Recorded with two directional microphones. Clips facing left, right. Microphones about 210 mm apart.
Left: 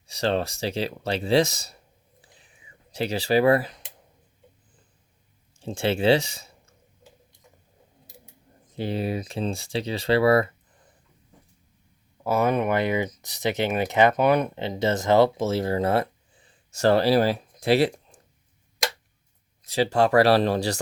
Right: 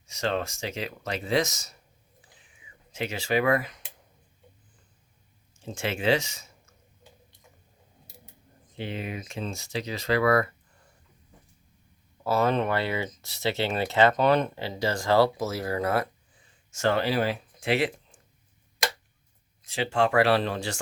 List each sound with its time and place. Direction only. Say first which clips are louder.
0.1 s speech: left 4 dB; 35° left (ahead or behind)
2.9 s speech: left 5 dB; 35° left (ahead or behind)
5.5 s speech: left 7 dB; 30° left (ahead or behind)
8.7 s speech: left 7 dB; 40° left (ahead or behind)
12.2 s speech: left 2 dB; 15° left (ahead or behind); by 18.2 s 35° left (ahead or behind)
19.6 s speech: left 4 dB; 40° left (ahead or behind)